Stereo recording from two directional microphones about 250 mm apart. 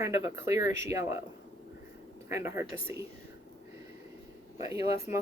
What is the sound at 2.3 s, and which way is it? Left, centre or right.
Speech, centre.